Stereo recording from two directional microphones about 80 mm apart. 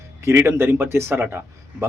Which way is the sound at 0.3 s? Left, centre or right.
Right.